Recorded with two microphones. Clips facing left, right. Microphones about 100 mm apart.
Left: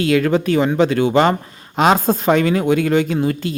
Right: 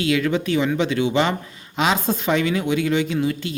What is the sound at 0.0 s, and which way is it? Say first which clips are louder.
Speech: left 5 dB; 45° left (ahead or behind).